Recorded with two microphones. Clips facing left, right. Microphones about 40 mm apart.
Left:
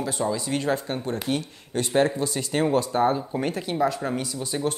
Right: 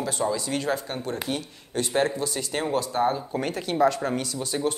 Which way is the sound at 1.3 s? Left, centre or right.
Left.